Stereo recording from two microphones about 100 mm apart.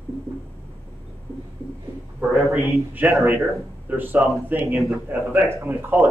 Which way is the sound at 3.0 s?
20° right (ahead or behind).